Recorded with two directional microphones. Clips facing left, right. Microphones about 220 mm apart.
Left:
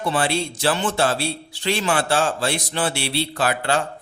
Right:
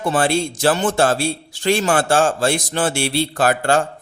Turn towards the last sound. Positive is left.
turn(degrees=-45)  # may be behind; listen again after turning